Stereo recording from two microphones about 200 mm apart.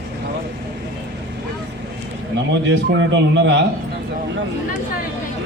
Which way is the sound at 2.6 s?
65° right (ahead or behind).